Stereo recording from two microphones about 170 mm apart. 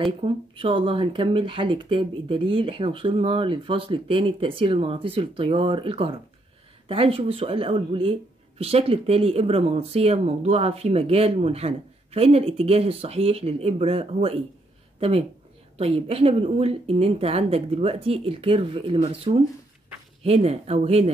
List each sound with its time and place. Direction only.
0.0 s speech: 30° right (ahead or behind)